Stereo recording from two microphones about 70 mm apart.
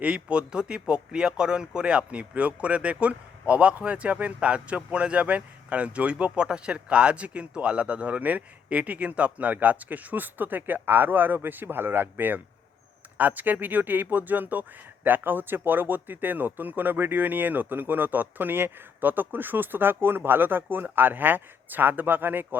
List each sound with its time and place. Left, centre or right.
0.0 s speech: centre